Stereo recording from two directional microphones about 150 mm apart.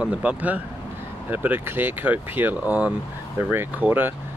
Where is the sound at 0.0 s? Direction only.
10° right (ahead or behind).